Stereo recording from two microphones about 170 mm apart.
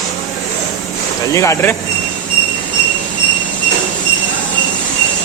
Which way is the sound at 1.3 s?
15° left (ahead or behind).